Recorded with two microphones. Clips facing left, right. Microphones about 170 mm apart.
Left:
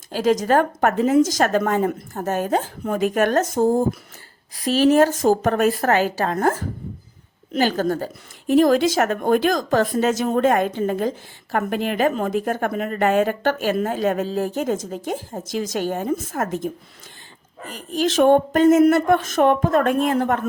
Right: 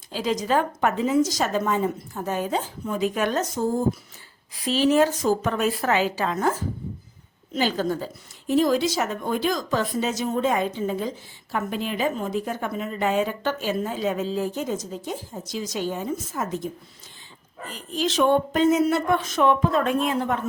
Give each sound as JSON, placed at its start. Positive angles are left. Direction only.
{"t": 0.1, "sound": "a woman's voice", "side_deg": 50}